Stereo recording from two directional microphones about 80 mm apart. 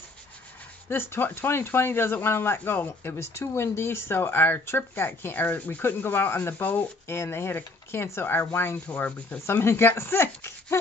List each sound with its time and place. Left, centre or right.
0.8 s speech: left
9.5 s speech: left